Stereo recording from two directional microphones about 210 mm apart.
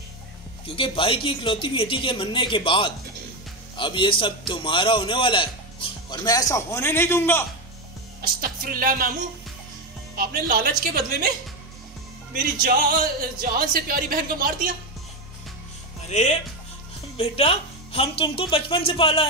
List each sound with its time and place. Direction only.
0.7 s a man's voice: 25° left (ahead or behind)
8.2 s speech: 45° right (ahead or behind)
10.1 s speech: 45° right (ahead or behind)
12.6 s speech: 45° right (ahead or behind)
16.1 s a man's voice: 35° left (ahead or behind)